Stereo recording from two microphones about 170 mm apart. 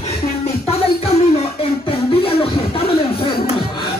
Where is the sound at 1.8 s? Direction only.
35° left (ahead or behind).